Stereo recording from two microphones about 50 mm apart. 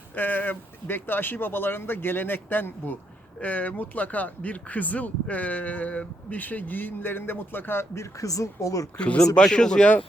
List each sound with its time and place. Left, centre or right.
0.2 s speech: left
3.4 s speech: left
7.9 s speech: left
9.0 s speech: left